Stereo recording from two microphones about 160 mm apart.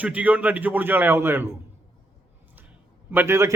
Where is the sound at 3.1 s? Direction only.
15° right (ahead or behind).